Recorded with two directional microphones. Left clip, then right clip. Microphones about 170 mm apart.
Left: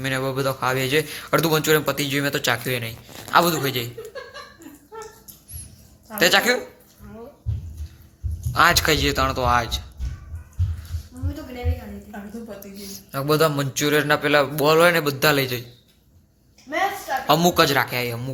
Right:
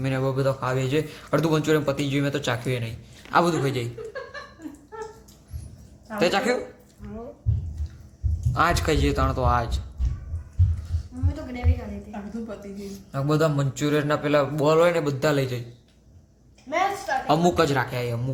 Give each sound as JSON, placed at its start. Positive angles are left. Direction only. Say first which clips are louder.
{"t": 0.2, "sound": "a man's voice", "louder": "left 1 dB", "side_deg": 20}
{"t": 3.3, "sound": "a man's voice", "louder": "left 3 dB", "side_deg": 0}
{"t": 6.1, "sound": "a man's voice", "louder": "left 5 dB", "side_deg": 10}
{"t": 8.5, "sound": "a man's voice", "louder": "left 5 dB", "side_deg": 5}
{"t": 13.1, "sound": "a man's voice", "louder": "left 4 dB", "side_deg": 20}
{"t": 17.2, "sound": "a man's voice", "louder": "left 4 dB", "side_deg": 5}